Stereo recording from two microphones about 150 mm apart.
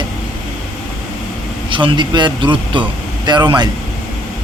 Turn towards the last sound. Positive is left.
turn(degrees=-30)  # may be behind; listen again after turning